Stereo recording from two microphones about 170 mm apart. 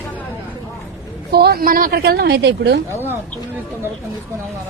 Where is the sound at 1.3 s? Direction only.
70° right (ahead or behind); by 2.8 s 90° right.